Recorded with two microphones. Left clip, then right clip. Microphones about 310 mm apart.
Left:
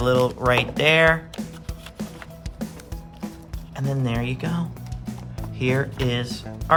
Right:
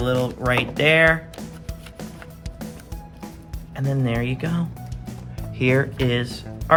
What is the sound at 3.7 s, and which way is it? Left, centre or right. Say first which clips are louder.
Speech: right 2 dB; centre.